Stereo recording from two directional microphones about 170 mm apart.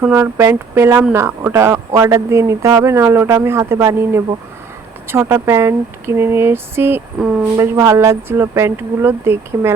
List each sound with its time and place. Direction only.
0.0 s speech: 15° right (ahead or behind)
7.6 s speech: 20° right (ahead or behind)